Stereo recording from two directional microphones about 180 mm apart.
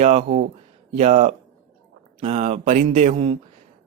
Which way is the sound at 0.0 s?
40° right (ahead or behind).